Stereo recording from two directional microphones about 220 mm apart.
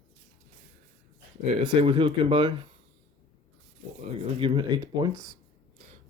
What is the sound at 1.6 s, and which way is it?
Speech, 20° right (ahead or behind).